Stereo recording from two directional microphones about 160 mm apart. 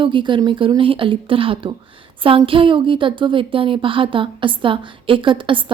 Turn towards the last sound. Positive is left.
turn(degrees=-30)  # may be behind; listen again after turning